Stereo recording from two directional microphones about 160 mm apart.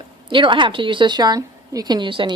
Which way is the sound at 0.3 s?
30° right (ahead or behind).